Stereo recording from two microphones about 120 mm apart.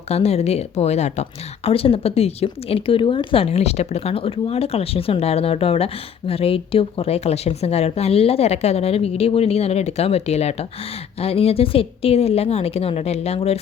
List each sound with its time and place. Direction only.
0.1 s speech: 60° left (ahead or behind)